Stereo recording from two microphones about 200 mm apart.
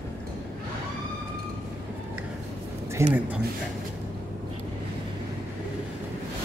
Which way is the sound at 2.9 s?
10° right (ahead or behind).